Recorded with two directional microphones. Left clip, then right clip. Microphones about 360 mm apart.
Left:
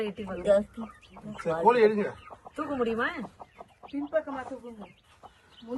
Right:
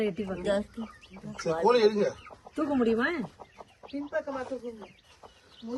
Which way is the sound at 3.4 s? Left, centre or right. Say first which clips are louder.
Left 1 dB; centre.